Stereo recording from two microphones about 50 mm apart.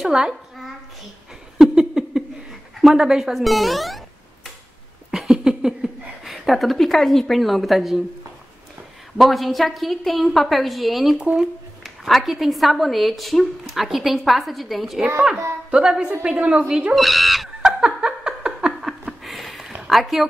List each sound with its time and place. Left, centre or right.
0.0 s a woman's voice: centre
1.6 s a sound: centre
2.9 s a woman's voice: centre
5.1 s speech: centre
9.2 s a woman's voice: centre
16.9 s a woman's voice: centre
17.6 s laughter: centre
19.0 s a sound: centre
19.9 s a woman's voice: centre